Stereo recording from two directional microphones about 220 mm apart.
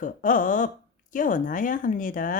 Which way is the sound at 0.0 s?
35° left (ahead or behind).